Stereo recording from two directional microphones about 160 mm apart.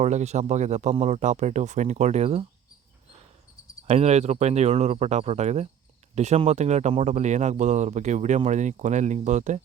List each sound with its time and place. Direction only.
0.0 s speech: 45° right (ahead or behind)
3.8 s speech: 40° right (ahead or behind)